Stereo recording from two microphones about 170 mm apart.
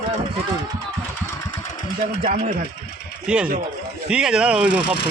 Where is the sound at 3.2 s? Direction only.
5° right (ahead or behind).